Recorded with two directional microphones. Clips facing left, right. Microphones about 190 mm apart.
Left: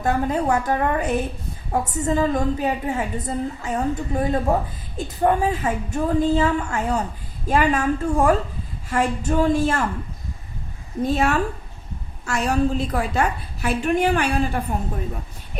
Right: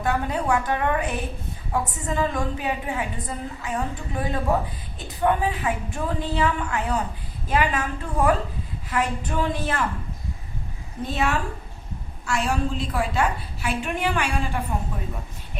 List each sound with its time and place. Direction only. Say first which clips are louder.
0.0 s a woman's voice: left 4 dB; 40° left (ahead or behind)
11.1 s a woman's voice: left 4 dB; 45° left (ahead or behind)